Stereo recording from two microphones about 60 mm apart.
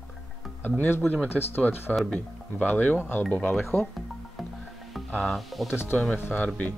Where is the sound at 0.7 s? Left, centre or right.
Left.